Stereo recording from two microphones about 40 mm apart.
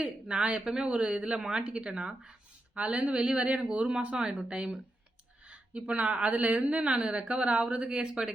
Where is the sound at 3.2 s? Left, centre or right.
Centre.